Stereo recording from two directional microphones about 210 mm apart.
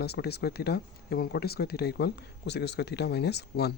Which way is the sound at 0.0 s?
50° left (ahead or behind).